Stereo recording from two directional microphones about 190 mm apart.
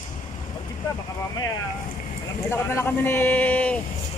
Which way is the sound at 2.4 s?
10° left (ahead or behind).